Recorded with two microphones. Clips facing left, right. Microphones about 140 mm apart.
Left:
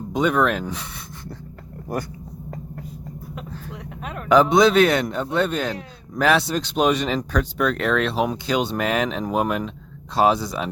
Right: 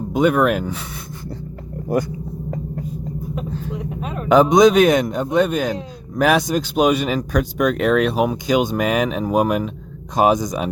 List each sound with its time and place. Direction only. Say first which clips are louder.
0.1 s speech: right 4 dB; 10° right (ahead or behind)
3.3 s speech: right 8 dB; 20° right (ahead or behind)